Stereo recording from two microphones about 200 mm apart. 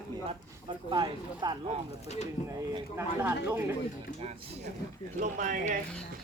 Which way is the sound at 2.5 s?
15° right (ahead or behind).